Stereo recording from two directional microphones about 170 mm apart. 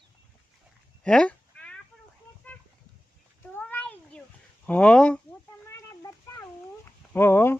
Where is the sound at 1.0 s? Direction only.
5° left (ahead or behind).